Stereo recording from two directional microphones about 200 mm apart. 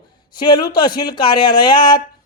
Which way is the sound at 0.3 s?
20° left (ahead or behind).